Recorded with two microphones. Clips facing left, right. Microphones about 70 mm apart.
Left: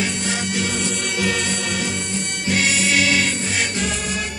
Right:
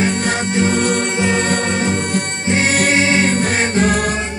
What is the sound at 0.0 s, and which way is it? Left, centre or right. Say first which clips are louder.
Music: right 6 dB; right.